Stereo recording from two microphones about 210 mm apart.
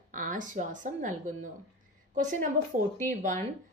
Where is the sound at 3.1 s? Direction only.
35° right (ahead or behind).